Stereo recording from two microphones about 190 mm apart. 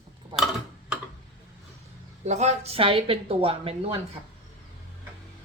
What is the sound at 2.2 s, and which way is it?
Speech, 35° right (ahead or behind).